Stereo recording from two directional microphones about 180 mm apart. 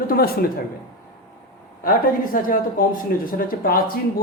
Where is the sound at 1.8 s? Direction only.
55° left (ahead or behind).